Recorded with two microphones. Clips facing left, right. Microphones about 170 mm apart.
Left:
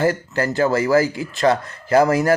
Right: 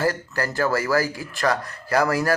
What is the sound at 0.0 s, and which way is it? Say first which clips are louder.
Speech: left 4 dB; 20° left (ahead or behind).